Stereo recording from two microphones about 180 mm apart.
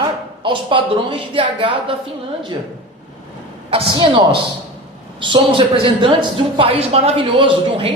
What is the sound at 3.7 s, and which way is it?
Speech, 30° right (ahead or behind).